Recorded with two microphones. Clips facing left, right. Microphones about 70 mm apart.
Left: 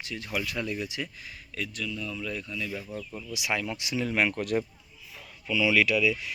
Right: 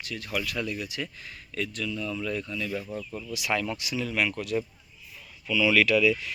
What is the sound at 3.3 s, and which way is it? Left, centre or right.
Speech, centre.